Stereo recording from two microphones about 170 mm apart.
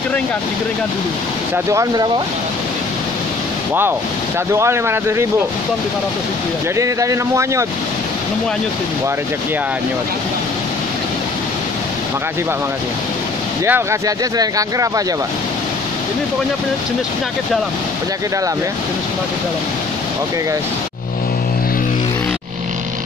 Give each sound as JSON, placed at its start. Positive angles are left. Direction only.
{"t": 1.7, "sound": "speech", "side_deg": -20}
{"t": 4.5, "sound": "speech", "side_deg": -15}
{"t": 6.8, "sound": "speech", "side_deg": -20}
{"t": 13.7, "sound": "speech", "side_deg": -15}